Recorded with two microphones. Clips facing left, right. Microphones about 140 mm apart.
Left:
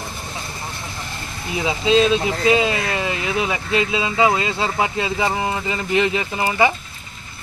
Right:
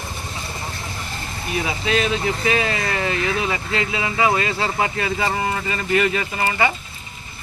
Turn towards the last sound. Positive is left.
turn(degrees=15)  # may be behind; listen again after turning